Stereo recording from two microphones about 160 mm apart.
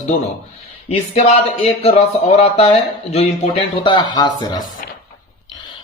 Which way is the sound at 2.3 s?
40° left (ahead or behind).